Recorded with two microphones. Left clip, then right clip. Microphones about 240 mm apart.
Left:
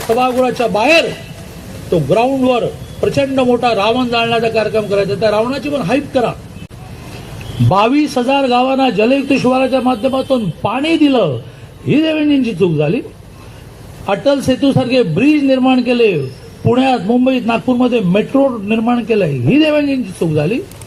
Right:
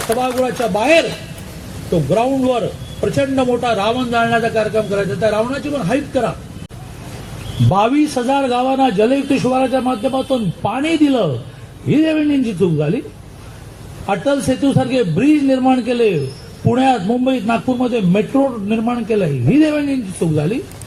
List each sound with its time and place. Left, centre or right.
0.2 s speech: left
7.7 s speech: left
14.1 s speech: left